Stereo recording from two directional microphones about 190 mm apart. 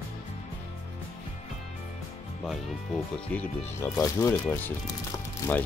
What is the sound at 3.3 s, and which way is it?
Speech, 15° left (ahead or behind).